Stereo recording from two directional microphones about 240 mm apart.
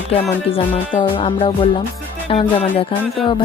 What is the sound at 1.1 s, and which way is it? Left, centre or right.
Music, left.